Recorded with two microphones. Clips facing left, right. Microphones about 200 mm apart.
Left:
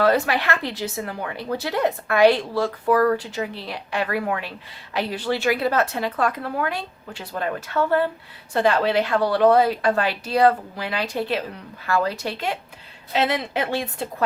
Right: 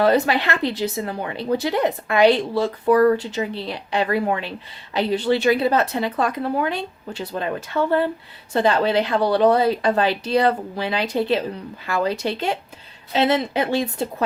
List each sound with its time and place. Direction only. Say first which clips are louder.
0.0 s speech: right 2 dB; 25° right (ahead or behind)